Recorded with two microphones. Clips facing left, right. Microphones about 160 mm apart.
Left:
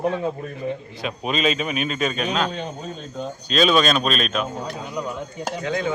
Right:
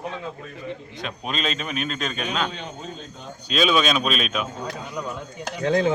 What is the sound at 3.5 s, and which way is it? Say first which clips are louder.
Speech: left 2 dB; 5° right (ahead or behind).